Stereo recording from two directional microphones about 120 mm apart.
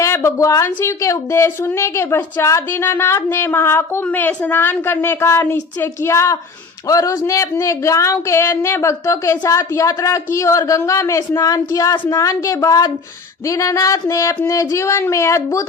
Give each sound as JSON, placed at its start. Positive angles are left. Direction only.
{"t": 0.0, "sound": "a woman's voice", "side_deg": 20}